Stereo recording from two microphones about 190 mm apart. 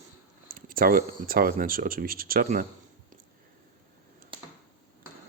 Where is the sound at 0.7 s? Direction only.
50° right (ahead or behind).